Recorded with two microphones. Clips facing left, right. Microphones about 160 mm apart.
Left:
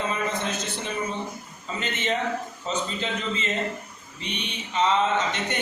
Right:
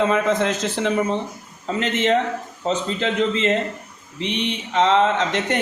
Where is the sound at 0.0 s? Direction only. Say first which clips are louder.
Right 9 dB; 90° right.